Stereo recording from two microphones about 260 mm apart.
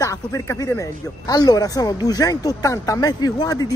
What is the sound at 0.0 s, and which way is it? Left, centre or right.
Speech, centre.